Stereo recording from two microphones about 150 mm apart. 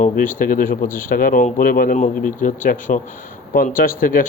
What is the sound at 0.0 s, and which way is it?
Speech, 65° left (ahead or behind).